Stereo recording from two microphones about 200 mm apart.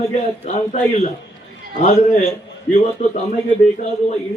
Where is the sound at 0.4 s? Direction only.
35° left (ahead or behind).